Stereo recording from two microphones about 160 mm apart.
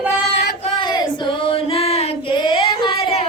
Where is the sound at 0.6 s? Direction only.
25° left (ahead or behind).